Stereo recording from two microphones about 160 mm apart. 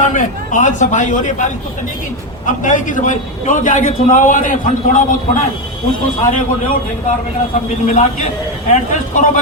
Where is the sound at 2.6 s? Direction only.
55° left (ahead or behind).